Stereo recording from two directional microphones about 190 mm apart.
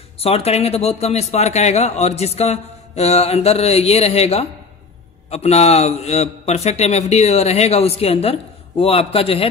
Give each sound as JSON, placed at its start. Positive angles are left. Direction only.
{"t": 0.2, "sound": "speech", "side_deg": 30}